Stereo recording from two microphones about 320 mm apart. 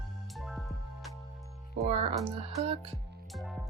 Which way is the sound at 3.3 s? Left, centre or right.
Centre.